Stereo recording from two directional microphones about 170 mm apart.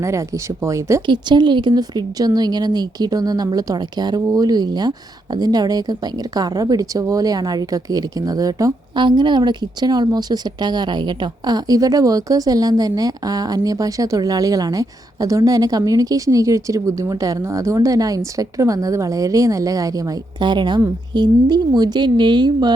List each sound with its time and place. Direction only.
0.0 s speech: 15° right (ahead or behind)